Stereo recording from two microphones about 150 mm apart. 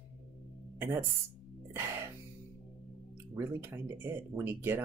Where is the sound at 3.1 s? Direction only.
15° right (ahead or behind).